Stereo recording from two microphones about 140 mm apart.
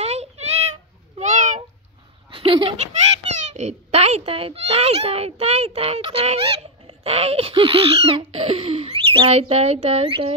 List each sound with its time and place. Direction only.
0.0 s child singing: 50° right (ahead or behind)
1.2 s cat: 60° right (ahead or behind)
2.3 s a sound: 40° right (ahead or behind)
3.3 s a child's voice: 55° right (ahead or behind)